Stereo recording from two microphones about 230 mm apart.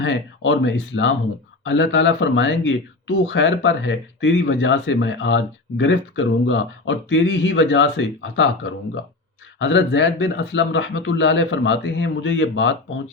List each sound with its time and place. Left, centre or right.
0.0 s speech: left